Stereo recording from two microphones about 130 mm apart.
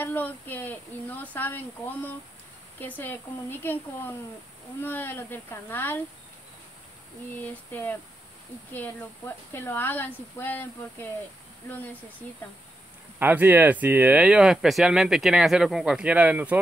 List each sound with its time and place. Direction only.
0.0 s speech: 15° left (ahead or behind)
7.4 s speech: 15° left (ahead or behind)
9.5 s speech: 15° left (ahead or behind)
13.2 s speech: 15° right (ahead or behind)